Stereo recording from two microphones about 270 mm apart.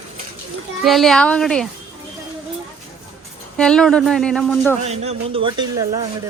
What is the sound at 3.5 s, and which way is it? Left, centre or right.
Speech, centre.